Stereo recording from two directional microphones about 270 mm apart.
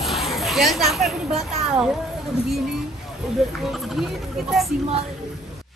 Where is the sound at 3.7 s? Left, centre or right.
Centre.